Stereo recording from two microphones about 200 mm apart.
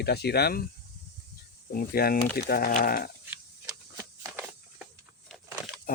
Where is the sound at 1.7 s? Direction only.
50° left (ahead or behind).